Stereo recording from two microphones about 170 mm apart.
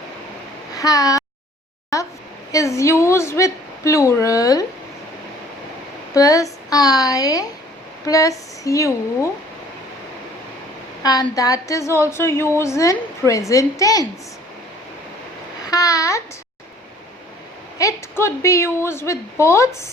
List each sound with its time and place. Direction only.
0.8 s speech: 20° left (ahead or behind)
1.9 s a sound: 20° left (ahead or behind)
2.5 s a woman's voice: 20° left (ahead or behind)
6.1 s a woman's voice: 20° left (ahead or behind)
11.0 s a woman's voice: 20° left (ahead or behind)
15.6 s a child's voice: 20° left (ahead or behind)
17.7 s a woman's voice: 15° left (ahead or behind)